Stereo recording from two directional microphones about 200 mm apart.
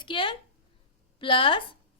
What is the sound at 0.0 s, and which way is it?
A woman's voice, 25° left (ahead or behind).